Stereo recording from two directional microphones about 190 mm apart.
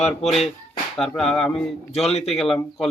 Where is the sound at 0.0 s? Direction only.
Centre (ahead or behind).